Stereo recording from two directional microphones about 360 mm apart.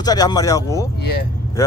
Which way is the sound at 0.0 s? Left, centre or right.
Centre.